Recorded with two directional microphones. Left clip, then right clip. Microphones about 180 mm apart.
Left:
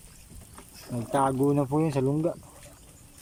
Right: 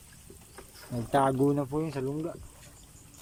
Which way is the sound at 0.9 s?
Centre (ahead or behind).